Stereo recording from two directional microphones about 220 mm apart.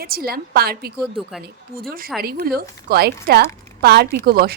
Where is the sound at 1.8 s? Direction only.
40° right (ahead or behind).